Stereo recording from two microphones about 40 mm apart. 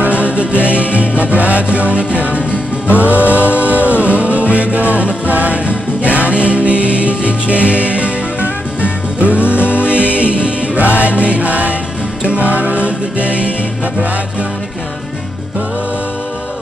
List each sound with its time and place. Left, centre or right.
0.2 s music: right